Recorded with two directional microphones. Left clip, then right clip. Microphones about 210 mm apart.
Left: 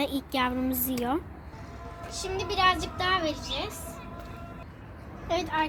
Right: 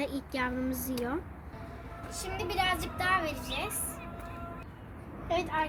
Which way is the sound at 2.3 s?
45° left (ahead or behind).